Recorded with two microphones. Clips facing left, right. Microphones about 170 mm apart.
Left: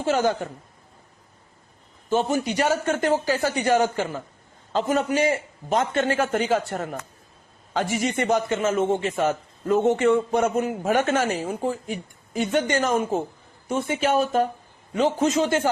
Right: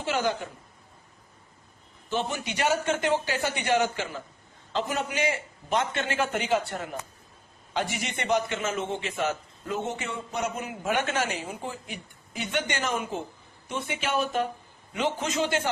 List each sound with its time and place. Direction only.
0.0 s a man's voice: 45° left (ahead or behind)
2.0 s a man's voice: 40° left (ahead or behind)